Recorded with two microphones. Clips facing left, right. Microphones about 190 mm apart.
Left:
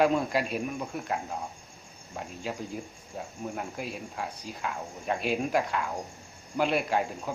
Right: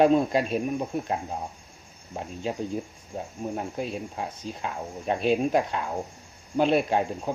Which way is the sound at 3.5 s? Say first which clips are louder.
Right 7 dB; 25° right (ahead or behind).